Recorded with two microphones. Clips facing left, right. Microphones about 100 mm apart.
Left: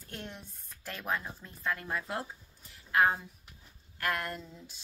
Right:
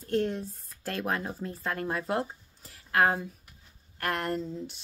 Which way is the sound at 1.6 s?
35° right (ahead or behind).